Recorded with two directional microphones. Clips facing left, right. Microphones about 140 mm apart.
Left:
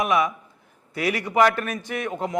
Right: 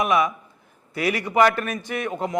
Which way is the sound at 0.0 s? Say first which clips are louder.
Right 1 dB; 15° right (ahead or behind).